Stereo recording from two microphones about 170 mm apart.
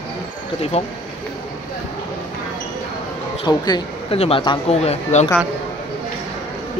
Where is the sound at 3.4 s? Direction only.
25° left (ahead or behind).